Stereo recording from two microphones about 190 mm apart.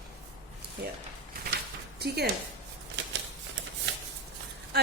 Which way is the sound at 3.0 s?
70° right (ahead or behind).